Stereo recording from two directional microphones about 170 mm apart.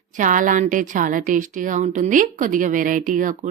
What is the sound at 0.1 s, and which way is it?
Speech, 50° right (ahead or behind).